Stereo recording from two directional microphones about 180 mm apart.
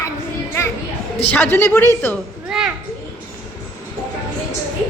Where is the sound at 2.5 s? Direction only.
5° right (ahead or behind).